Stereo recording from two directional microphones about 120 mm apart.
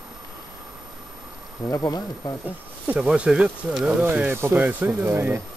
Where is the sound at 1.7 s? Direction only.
25° left (ahead or behind).